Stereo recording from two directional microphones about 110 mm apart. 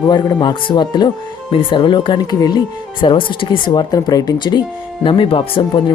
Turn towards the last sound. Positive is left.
turn(degrees=45)  # may be behind; listen again after turning